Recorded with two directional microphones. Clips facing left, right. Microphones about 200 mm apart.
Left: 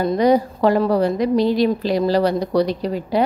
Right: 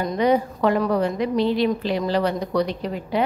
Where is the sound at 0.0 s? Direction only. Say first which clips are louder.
Left 4 dB; 35° left (ahead or behind).